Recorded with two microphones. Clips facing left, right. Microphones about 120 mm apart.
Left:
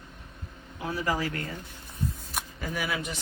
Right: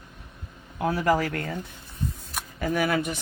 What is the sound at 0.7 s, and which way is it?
Speech, 55° right (ahead or behind).